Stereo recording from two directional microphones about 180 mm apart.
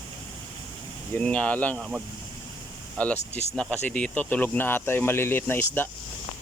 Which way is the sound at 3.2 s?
40° left (ahead or behind).